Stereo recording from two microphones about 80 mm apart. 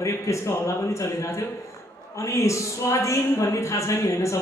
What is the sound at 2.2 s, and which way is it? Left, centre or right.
A woman's voice, left.